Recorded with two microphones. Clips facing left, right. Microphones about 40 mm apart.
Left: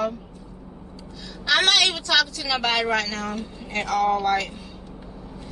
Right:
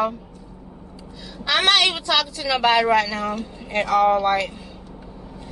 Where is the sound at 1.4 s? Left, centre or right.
Centre.